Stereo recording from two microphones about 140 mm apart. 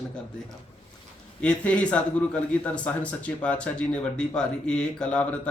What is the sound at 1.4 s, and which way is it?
A man's voice, 10° left (ahead or behind).